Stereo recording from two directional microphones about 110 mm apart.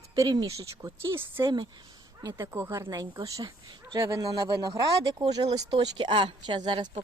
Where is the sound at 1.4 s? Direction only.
40° right (ahead or behind).